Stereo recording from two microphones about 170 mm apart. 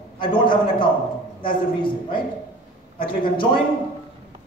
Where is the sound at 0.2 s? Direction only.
30° left (ahead or behind).